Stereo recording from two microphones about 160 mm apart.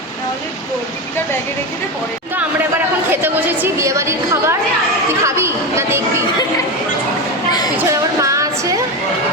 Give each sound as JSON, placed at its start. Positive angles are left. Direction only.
{"t": 3.1, "sound": "a woman's voice", "side_deg": -15}
{"t": 7.8, "sound": "speech", "side_deg": -20}